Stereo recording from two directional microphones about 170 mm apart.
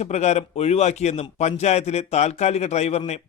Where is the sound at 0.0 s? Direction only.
40° left (ahead or behind).